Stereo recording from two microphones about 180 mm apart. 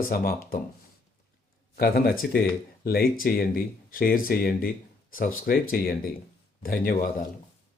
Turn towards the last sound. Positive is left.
turn(degrees=50)  # may be behind; listen again after turning